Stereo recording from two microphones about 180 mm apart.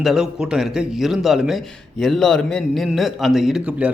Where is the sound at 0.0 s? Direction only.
Centre (ahead or behind).